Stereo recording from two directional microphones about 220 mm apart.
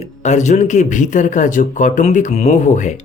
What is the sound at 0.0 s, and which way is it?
Speech, 30° left (ahead or behind).